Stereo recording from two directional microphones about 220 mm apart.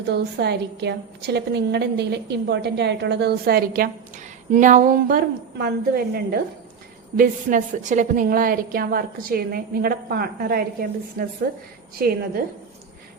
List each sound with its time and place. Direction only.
0.1 s a woman's voice: 50° right (ahead or behind)